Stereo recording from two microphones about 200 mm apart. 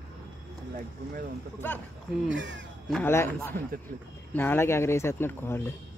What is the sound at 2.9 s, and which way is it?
Speech, 10° left (ahead or behind).